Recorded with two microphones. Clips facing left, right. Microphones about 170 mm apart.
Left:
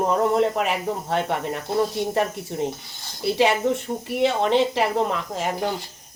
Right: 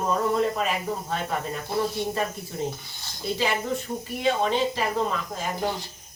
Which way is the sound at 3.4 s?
70° left (ahead or behind).